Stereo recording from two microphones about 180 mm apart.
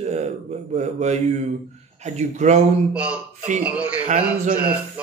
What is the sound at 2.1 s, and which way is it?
Speech, 40° right (ahead or behind).